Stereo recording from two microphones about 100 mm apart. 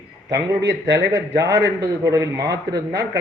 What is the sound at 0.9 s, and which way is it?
A man's voice, 30° right (ahead or behind).